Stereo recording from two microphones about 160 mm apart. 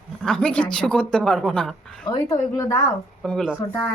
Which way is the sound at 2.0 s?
25° left (ahead or behind).